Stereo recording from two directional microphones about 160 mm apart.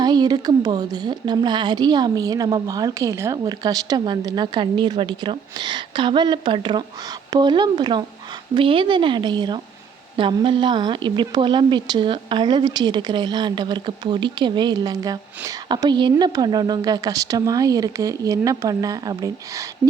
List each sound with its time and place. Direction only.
0.0 s a woman's voice: 25° right (ahead or behind)